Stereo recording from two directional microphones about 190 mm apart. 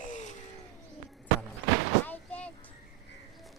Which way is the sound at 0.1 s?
40° left (ahead or behind).